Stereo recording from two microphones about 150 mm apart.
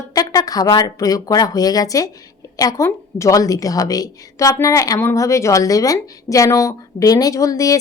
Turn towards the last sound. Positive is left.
turn(degrees=25)  # may be behind; listen again after turning